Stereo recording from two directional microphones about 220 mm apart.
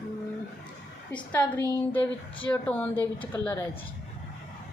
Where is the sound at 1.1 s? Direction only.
10° left (ahead or behind).